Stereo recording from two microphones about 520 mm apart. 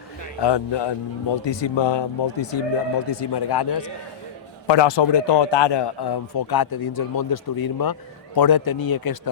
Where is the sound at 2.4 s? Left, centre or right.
Left.